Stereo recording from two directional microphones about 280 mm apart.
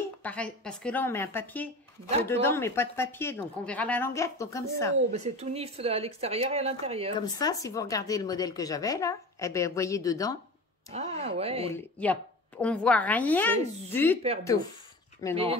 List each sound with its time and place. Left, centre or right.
0.2 s a woman's voice: centre
5.1 s speech: right
7.2 s speech: centre
10.9 s speech: right
11.7 s a woman's voice: centre
15.2 s speech: centre